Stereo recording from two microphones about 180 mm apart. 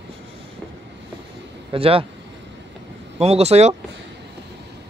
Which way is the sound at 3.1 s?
35° right (ahead or behind).